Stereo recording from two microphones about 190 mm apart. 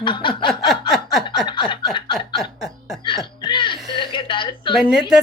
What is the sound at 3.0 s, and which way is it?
Music, 25° left (ahead or behind).